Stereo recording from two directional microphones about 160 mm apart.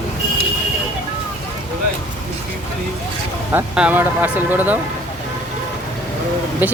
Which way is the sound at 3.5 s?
10° right (ahead or behind).